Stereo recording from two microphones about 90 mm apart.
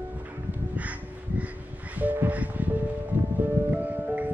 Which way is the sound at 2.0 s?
15° right (ahead or behind).